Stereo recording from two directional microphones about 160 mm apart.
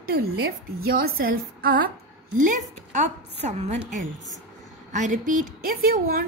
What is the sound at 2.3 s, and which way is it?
A woman's voice, 55° right (ahead or behind).